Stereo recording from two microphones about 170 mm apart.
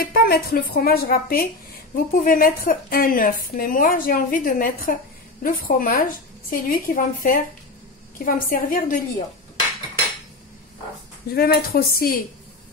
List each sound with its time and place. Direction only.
0.0 s a woman's voice: 60° left (ahead or behind)
11.3 s a woman's voice: 65° left (ahead or behind)